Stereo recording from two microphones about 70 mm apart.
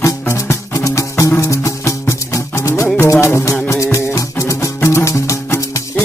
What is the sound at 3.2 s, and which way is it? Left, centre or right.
Music, left.